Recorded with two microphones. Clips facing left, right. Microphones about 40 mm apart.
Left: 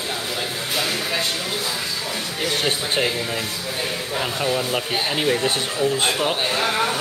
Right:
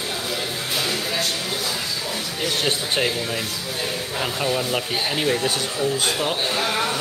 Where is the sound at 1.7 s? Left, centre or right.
Centre.